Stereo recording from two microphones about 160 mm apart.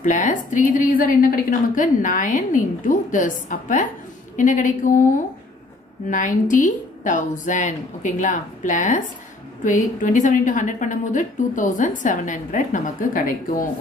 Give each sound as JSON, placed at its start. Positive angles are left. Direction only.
{"t": 0.0, "sound": "a woman's voice", "side_deg": 55}